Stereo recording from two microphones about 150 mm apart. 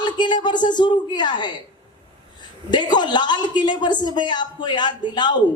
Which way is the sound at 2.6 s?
30° left (ahead or behind).